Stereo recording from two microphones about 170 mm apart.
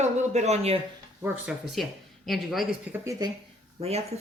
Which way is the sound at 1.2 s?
10° right (ahead or behind).